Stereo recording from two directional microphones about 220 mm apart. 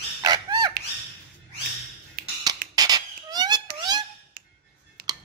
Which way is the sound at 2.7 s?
15° right (ahead or behind).